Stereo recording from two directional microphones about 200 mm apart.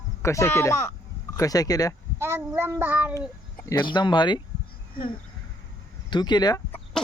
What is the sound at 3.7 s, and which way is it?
Speech, 25° left (ahead or behind).